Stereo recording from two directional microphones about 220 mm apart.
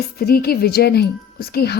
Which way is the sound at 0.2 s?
45° left (ahead or behind).